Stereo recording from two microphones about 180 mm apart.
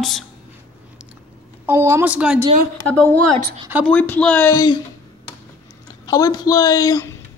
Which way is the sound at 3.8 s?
10° left (ahead or behind).